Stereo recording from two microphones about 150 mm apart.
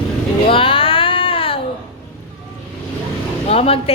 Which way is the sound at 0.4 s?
35° left (ahead or behind).